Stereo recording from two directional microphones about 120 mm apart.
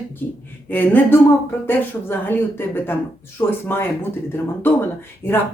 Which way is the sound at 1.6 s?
20° left (ahead or behind).